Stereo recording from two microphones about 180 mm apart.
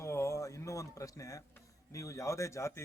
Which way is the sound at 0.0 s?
15° left (ahead or behind).